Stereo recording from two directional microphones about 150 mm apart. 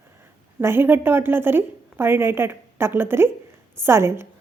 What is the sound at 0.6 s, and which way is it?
A woman's voice, 15° right (ahead or behind).